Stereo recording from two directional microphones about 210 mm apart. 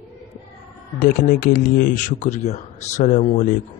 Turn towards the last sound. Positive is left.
turn(degrees=40)  # may be behind; listen again after turning